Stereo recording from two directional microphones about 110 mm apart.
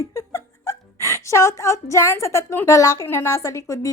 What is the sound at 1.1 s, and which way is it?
A woman's voice, 25° left (ahead or behind).